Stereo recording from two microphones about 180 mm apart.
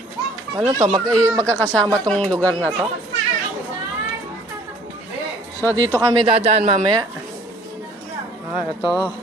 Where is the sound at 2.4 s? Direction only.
15° right (ahead or behind).